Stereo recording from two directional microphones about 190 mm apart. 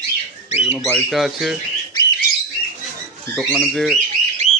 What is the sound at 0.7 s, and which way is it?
Speech, centre (ahead or behind).